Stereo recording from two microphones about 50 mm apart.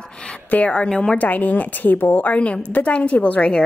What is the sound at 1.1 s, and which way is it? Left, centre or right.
A woman's voice, left.